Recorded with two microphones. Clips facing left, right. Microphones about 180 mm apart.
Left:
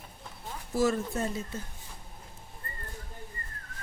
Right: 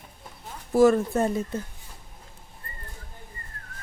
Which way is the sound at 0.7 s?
55° right (ahead or behind).